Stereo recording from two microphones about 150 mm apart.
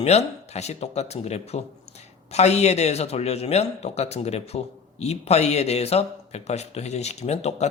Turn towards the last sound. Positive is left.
turn(degrees=45)  # may be behind; listen again after turning